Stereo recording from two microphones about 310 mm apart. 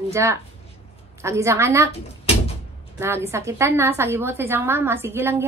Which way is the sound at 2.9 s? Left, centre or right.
Centre.